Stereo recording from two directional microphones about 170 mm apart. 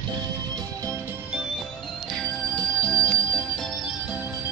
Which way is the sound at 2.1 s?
5° left (ahead or behind).